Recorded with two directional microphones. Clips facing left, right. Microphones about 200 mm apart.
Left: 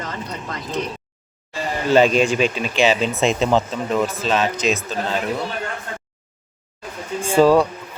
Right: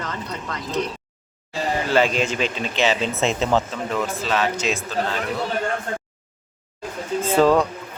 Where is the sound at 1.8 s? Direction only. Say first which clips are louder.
Left 7 dB; 15° left (ahead or behind).